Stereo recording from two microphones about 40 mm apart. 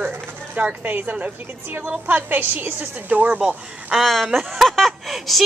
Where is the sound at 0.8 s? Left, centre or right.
Right.